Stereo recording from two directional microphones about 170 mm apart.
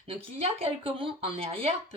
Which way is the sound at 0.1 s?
35° right (ahead or behind).